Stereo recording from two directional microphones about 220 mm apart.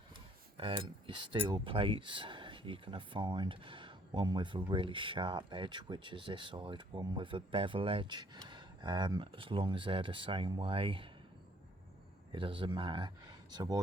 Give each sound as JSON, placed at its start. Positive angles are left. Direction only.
{"t": 0.5, "sound": "speech", "side_deg": -25}
{"t": 12.3, "sound": "speech", "side_deg": -20}